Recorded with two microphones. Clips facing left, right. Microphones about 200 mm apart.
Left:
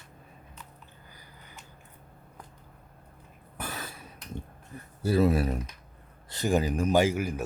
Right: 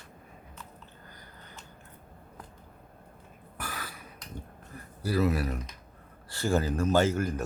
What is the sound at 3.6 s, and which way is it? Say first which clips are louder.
Cough: left 2 dB; 25° left (ahead or behind).